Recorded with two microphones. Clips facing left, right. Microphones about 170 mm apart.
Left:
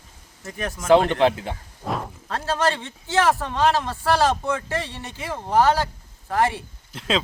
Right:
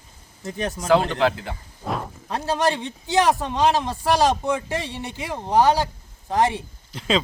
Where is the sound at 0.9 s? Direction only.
25° left (ahead or behind).